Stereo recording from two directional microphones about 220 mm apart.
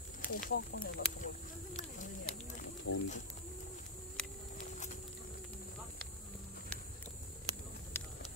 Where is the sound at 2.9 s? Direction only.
65° left (ahead or behind).